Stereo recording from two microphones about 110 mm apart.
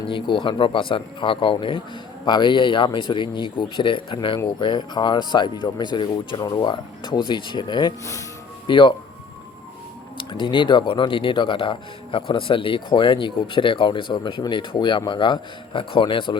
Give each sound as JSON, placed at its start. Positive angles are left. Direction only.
{"t": 0.1, "sound": "speech", "side_deg": 50}
{"t": 10.2, "sound": "speech", "side_deg": 50}